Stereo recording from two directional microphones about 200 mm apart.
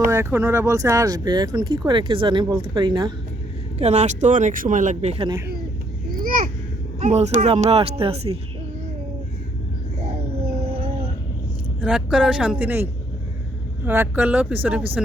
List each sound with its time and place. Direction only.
0.1 s speech: 15° right (ahead or behind)
3.8 s speech: 35° right (ahead or behind)
6.1 s a sound: 45° right (ahead or behind)
7.0 s speech: 35° right (ahead or behind)
11.8 s speech: 5° right (ahead or behind)